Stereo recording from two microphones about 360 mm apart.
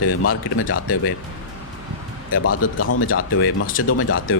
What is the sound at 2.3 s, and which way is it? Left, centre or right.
Speech, left.